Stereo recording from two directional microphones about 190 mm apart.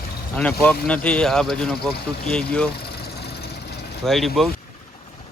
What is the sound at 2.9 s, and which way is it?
Vehicle, 55° left (ahead or behind).